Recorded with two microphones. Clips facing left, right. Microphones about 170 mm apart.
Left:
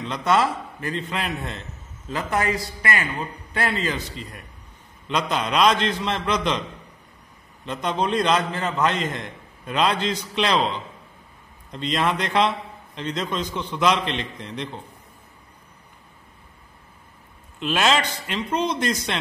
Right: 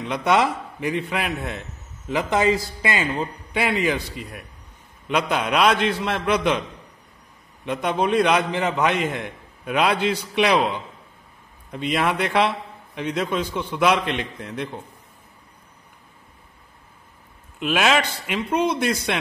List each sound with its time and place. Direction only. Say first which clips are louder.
0.0 s a man's voice: right 1 dB; 10° right (ahead or behind)
7.6 s a man's voice: right 2 dB; 10° right (ahead or behind)
17.6 s a man's voice: right 1 dB; 10° right (ahead or behind)